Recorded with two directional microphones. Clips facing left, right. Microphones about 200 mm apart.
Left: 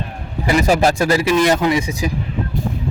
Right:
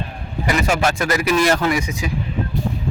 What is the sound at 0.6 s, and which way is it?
Speech, 35° left (ahead or behind).